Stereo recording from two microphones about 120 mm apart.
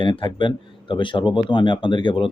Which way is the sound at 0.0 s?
40° left (ahead or behind).